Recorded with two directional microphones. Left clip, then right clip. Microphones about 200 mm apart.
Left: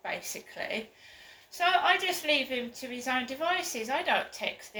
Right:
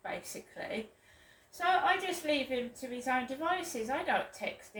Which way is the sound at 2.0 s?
15° right (ahead or behind).